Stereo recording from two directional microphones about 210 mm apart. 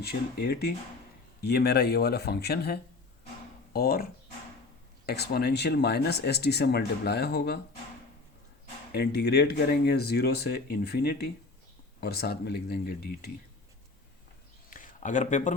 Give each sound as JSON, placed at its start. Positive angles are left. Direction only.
{"t": 0.0, "sound": "speech", "side_deg": 50}
{"t": 8.9, "sound": "speech", "side_deg": 50}
{"t": 14.7, "sound": "a sound", "side_deg": 40}